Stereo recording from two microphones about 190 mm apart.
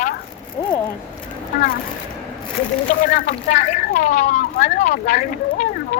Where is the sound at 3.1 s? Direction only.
45° left (ahead or behind).